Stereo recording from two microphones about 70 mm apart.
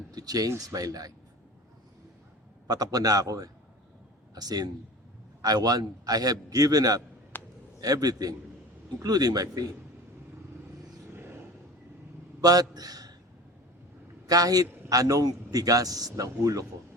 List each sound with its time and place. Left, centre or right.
0.1 s a man's voice: right
2.6 s a man's voice: right
7.3 s a sound: left
7.8 s a man's voice: right
12.4 s a man's voice: right
14.3 s a man's voice: right